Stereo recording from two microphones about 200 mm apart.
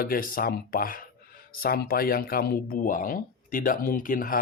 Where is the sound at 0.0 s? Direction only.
45° left (ahead or behind).